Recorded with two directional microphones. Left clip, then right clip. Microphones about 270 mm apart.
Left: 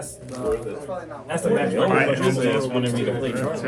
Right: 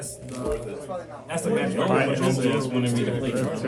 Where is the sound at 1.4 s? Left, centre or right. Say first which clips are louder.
Left 4 dB; centre.